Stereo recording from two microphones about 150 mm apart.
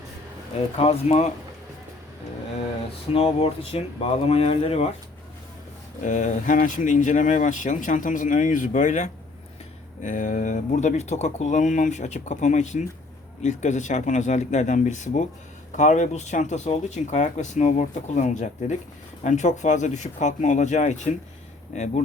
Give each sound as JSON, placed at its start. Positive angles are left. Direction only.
{"t": 0.8, "sound": "speech", "side_deg": 45}
{"t": 3.1, "sound": "speech", "side_deg": 40}
{"t": 6.1, "sound": "speech", "side_deg": 55}